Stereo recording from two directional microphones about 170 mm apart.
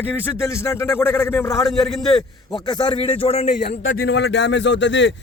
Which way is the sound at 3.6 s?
70° left (ahead or behind).